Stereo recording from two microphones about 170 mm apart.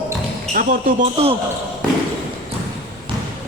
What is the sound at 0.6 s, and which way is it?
Speech, 55° right (ahead or behind).